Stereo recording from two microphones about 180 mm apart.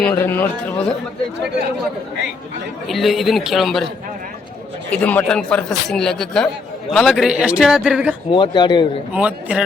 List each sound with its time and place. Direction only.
0.0 s speech: 15° left (ahead or behind)
2.8 s a man's voice: centre (ahead or behind)
4.9 s a man's voice: 10° left (ahead or behind)
8.3 s speech: 25° left (ahead or behind)
9.1 s a man's voice: 5° right (ahead or behind)